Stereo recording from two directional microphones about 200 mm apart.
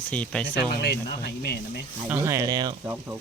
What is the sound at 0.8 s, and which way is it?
Speech, 55° left (ahead or behind).